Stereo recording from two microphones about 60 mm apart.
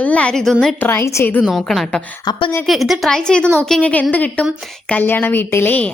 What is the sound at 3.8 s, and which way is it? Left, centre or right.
Speech, left.